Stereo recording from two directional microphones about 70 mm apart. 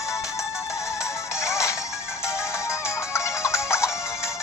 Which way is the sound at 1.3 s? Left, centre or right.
Left.